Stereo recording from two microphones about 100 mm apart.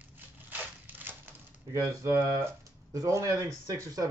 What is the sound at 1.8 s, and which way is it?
A man's voice, 35° right (ahead or behind).